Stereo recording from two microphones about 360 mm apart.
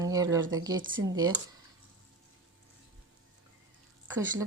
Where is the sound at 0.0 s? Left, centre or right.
Centre.